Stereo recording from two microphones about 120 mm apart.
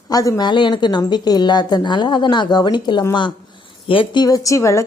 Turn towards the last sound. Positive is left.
turn(degrees=25)  # may be behind; listen again after turning